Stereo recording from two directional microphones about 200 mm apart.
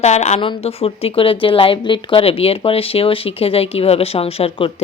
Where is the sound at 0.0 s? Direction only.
35° left (ahead or behind).